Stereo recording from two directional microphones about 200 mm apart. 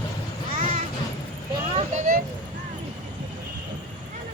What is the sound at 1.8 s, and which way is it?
Speech, 40° right (ahead or behind).